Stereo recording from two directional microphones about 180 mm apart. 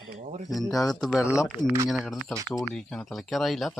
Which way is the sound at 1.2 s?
15° left (ahead or behind).